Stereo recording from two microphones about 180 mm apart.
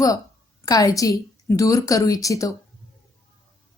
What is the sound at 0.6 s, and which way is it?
A woman's voice, 20° left (ahead or behind).